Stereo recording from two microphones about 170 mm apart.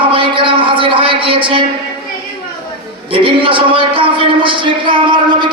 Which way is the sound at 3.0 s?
30° right (ahead or behind).